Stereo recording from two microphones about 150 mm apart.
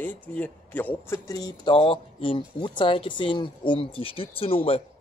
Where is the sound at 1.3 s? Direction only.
25° left (ahead or behind).